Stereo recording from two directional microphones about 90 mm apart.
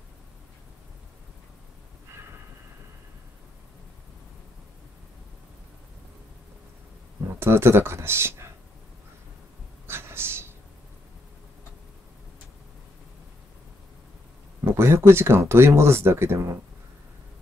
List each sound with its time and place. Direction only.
7.3 s speech: 25° right (ahead or behind)
9.8 s a sound: 25° right (ahead or behind)
14.6 s speech: 30° right (ahead or behind)